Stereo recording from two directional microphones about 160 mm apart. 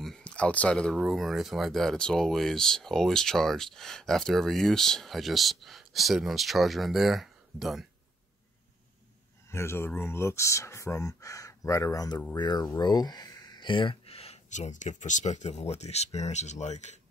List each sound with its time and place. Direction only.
0.0 s speech: 5° left (ahead or behind)
9.5 s speech: 15° left (ahead or behind); by 17.0 s 45° left (ahead or behind)